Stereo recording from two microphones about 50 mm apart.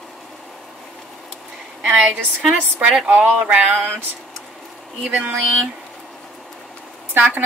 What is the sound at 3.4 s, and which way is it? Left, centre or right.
Speech, right.